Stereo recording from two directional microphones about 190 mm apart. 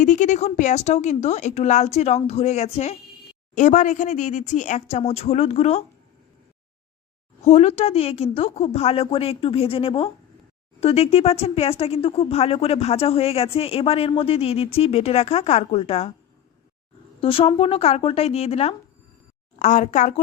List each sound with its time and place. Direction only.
0.0 s speech: 40° left (ahead or behind)
7.4 s speech: 35° left (ahead or behind)
17.2 s speech: 30° left (ahead or behind)